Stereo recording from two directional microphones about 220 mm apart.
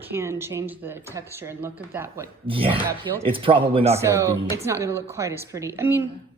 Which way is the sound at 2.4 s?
25° right (ahead or behind).